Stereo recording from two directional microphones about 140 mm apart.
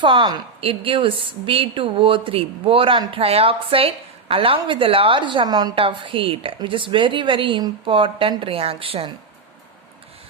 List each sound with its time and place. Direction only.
0.0 s a woman's voice: 35° right (ahead or behind)